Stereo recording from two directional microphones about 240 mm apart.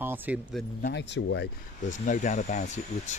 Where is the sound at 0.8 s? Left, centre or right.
Left.